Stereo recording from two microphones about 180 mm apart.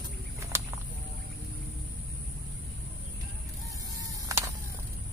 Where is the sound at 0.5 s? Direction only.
15° right (ahead or behind).